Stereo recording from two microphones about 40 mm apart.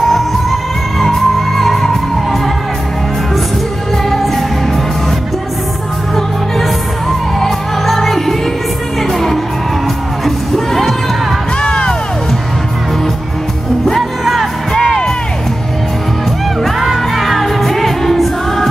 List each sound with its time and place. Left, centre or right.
0.1 s music: centre
4.1 s music: centre
6.1 s music: centre
11.6 s music: left
13.9 s music: centre
16.6 s music: centre